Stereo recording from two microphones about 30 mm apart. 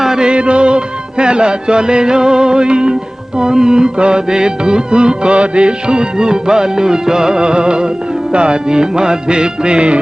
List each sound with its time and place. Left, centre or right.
0.0 s music: centre
0.3 s music: right